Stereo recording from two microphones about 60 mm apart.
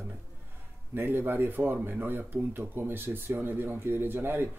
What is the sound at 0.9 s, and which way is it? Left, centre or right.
Speech, right.